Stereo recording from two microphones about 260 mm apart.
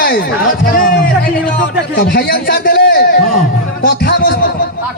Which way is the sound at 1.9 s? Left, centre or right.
Left.